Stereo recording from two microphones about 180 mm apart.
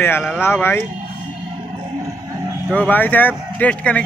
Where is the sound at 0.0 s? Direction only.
10° left (ahead or behind).